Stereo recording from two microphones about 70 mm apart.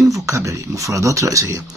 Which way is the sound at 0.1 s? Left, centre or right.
Right.